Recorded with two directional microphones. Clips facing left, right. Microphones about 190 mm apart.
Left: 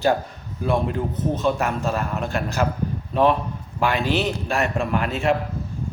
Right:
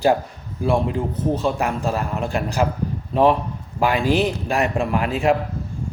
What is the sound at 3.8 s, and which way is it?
A man's voice, 10° right (ahead or behind).